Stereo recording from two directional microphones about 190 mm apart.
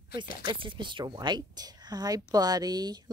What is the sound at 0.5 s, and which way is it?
Speech, 25° right (ahead or behind).